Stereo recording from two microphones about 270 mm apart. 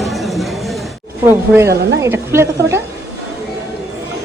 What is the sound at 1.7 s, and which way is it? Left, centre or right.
Speech, right.